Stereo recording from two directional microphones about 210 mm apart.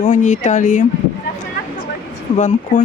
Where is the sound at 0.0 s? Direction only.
35° left (ahead or behind).